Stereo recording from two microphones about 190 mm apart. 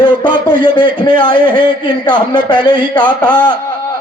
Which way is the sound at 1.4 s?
45° right (ahead or behind).